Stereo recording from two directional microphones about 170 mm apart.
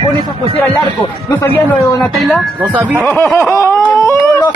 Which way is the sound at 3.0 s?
5° left (ahead or behind).